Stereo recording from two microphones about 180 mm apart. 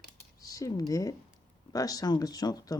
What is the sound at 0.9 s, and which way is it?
Speech, 20° left (ahead or behind).